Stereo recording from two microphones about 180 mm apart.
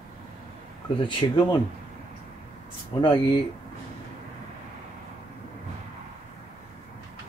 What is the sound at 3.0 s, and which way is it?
Speech, 25° left (ahead or behind).